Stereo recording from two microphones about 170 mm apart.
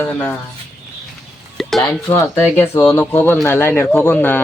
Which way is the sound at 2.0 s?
15° left (ahead or behind).